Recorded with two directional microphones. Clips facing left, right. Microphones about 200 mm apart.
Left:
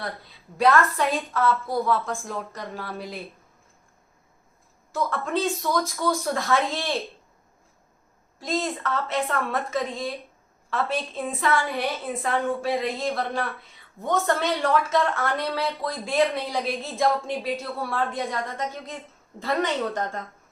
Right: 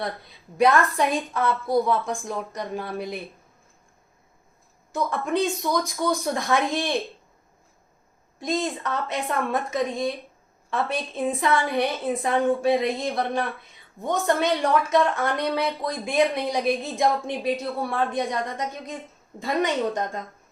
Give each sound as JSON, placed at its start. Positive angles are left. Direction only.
{"t": 0.5, "sound": "a woman's voice", "side_deg": -15}
{"t": 4.9, "sound": "a woman's voice", "side_deg": -15}
{"t": 8.4, "sound": "a woman's voice", "side_deg": -15}